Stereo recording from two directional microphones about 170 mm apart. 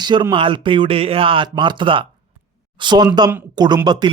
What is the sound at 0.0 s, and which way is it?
A man's voice, 25° right (ahead or behind).